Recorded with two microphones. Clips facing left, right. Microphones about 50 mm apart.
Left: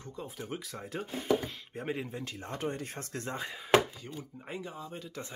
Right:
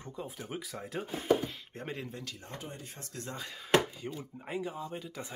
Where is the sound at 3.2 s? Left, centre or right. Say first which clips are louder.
Left 3 dB; left.